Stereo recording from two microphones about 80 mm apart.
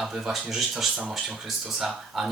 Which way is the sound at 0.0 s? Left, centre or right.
Centre.